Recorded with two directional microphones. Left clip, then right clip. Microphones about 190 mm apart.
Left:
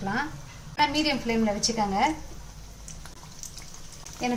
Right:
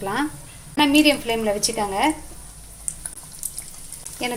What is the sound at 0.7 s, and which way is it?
Speech, 50° right (ahead or behind).